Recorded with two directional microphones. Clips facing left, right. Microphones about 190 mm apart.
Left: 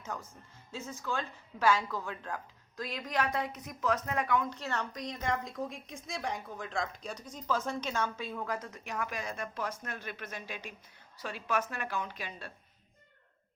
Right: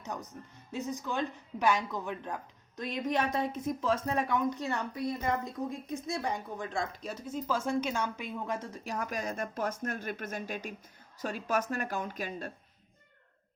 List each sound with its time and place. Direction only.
0.0 s speech: 20° right (ahead or behind); by 5.6 s 5° right (ahead or behind)
5.7 s speech: 90° left
6.1 s a woman's voice: centre (ahead or behind); by 12.5 s 45° right (ahead or behind)